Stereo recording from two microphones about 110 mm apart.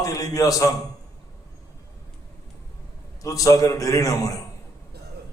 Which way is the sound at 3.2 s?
30° left (ahead or behind).